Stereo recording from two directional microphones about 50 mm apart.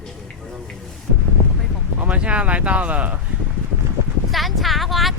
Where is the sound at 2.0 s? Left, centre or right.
Right.